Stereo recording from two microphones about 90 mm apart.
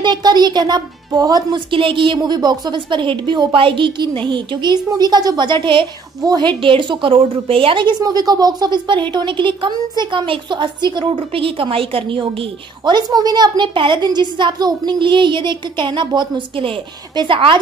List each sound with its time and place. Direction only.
0.0 s a woman's voice: 55° right (ahead or behind)
1.7 s a woman's voice: 70° right (ahead or behind)
2.1 s a woman's voice: 50° right (ahead or behind)
6.2 s a woman's voice: 50° right (ahead or behind)
6.6 s a woman's voice: 70° right (ahead or behind)
8.0 s a woman's voice: 45° right (ahead or behind)
13.7 s a woman's voice: 65° right (ahead or behind)
14.0 s a woman's voice: 55° right (ahead or behind)